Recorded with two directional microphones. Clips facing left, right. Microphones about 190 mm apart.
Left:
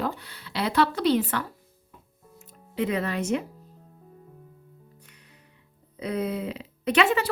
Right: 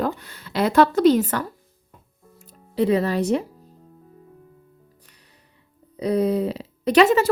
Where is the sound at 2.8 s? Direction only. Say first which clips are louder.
Right 7 dB; 35° right (ahead or behind).